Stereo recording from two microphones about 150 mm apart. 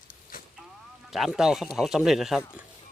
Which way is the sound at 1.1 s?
Centre (ahead or behind).